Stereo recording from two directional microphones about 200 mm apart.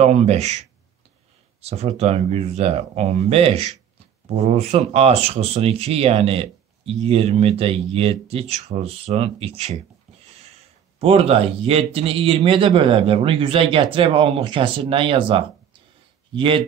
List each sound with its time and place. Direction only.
0.0 s speech: 35° right (ahead or behind)
11.0 s speech: 30° right (ahead or behind)